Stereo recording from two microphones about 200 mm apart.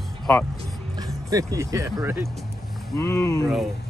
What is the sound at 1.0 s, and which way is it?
Speech, 15° right (ahead or behind).